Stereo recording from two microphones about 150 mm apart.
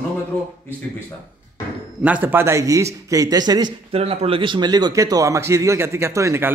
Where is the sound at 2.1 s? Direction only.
10° right (ahead or behind); by 3.7 s 25° right (ahead or behind).